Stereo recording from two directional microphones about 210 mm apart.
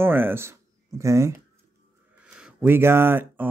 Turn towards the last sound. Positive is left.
turn(degrees=-10)  # may be behind; listen again after turning